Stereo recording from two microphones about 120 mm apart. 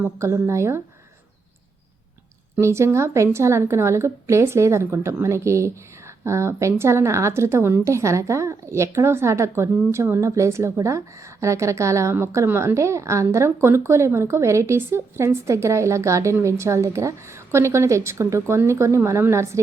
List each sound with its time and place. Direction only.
0.0 s a woman's voice: 25° right (ahead or behind)
2.6 s a woman's voice: 25° right (ahead or behind)